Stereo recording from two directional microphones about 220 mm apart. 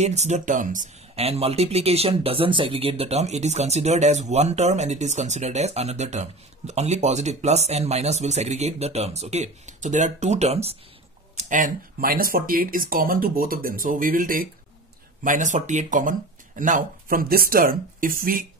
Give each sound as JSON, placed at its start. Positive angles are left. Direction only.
{"t": 0.0, "sound": "speech", "side_deg": -30}